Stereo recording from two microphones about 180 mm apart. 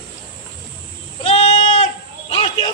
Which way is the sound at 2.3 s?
30° left (ahead or behind).